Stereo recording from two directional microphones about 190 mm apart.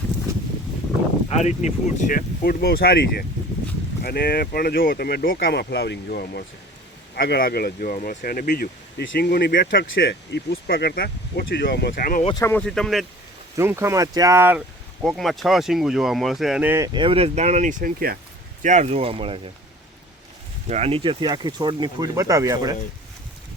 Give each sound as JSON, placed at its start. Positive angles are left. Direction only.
{"t": 1.3, "sound": "speech", "side_deg": 35}
{"t": 9.8, "sound": "speech", "side_deg": 65}
{"t": 12.2, "sound": "speech", "side_deg": 25}
{"t": 12.5, "sound": "speech", "side_deg": 5}
{"t": 13.6, "sound": "speech", "side_deg": -15}
{"t": 15.0, "sound": "speech", "side_deg": 0}
{"t": 18.6, "sound": "speech", "side_deg": -40}
{"t": 20.7, "sound": "speech", "side_deg": -35}